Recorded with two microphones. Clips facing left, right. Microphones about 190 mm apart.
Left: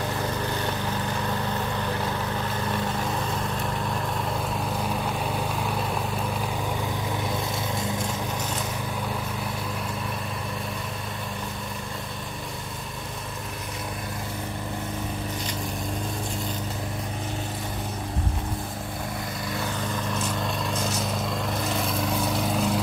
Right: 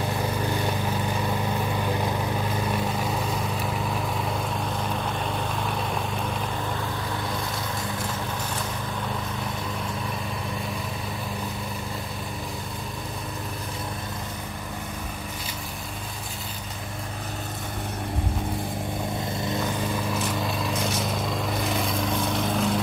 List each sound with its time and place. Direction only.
0.5 s vehicle: 15° right (ahead or behind); by 6.3 s 5° left (ahead or behind)
19.4 s vehicle: 20° right (ahead or behind)
20.1 s vehicle: 5° right (ahead or behind)